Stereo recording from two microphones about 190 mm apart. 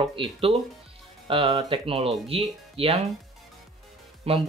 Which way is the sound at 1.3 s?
30° right (ahead or behind).